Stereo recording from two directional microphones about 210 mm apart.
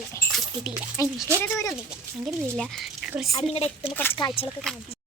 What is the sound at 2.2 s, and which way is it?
Speech, centre (ahead or behind).